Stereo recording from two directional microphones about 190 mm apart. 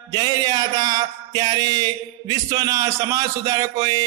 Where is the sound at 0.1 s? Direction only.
20° right (ahead or behind).